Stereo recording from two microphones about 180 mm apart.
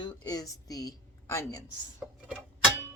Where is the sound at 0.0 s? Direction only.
20° left (ahead or behind).